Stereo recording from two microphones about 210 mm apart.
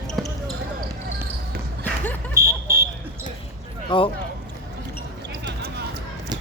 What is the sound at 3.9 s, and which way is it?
Speech, 25° left (ahead or behind).